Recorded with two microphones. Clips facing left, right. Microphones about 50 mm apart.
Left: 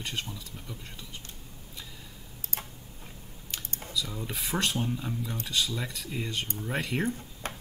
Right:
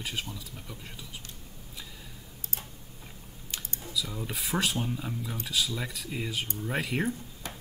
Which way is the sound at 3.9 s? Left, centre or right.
Centre.